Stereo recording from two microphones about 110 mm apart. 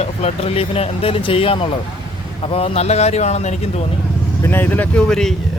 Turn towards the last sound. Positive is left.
turn(degrees=5)  # may be behind; listen again after turning